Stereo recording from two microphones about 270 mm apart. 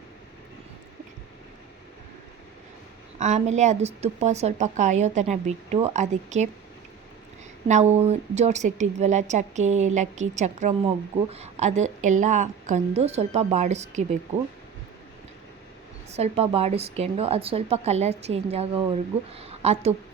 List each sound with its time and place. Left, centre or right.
3.2 s a woman's voice: right
7.7 s a woman's voice: right
16.1 s a woman's voice: right